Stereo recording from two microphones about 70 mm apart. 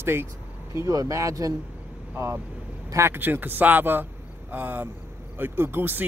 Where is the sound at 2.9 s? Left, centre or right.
Right.